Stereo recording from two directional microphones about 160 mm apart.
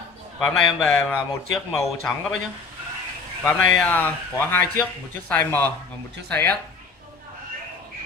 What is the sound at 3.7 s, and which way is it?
Speech, 5° left (ahead or behind).